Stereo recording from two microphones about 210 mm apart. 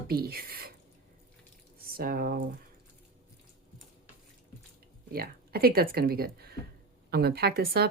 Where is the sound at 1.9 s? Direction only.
45° right (ahead or behind).